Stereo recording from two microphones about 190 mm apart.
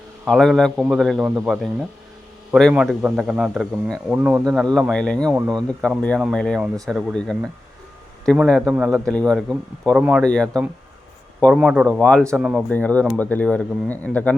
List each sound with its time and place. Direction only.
0.3 s a man's voice: centre (ahead or behind)
4.4 s a man's voice: centre (ahead or behind)
5.3 s speech: 10° right (ahead or behind)
5.6 s a man's voice: 5° left (ahead or behind)
9.0 s a man's voice: 5° left (ahead or behind)
11.5 s a man's voice: 5° right (ahead or behind)
12.4 s a man's voice: 5° right (ahead or behind)
12.7 s speech: 5° left (ahead or behind)